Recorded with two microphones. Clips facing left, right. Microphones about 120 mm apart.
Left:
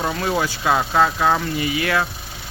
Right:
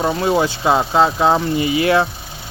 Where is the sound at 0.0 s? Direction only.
25° right (ahead or behind).